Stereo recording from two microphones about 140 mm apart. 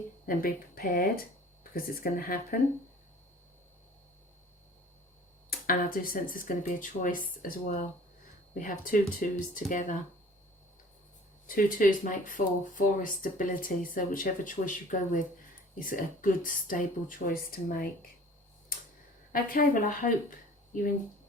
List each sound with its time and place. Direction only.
0.3 s speech: 90° left
5.5 s speech: 90° left; by 7.9 s 70° left (ahead or behind)
8.5 s speech: 85° left; by 10.0 s 65° left (ahead or behind)
11.4 s speech: 85° left
15.7 s speech: 85° left
19.3 s speech: 85° left